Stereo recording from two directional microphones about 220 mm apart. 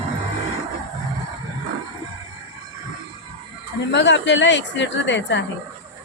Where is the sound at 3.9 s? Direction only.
55° left (ahead or behind).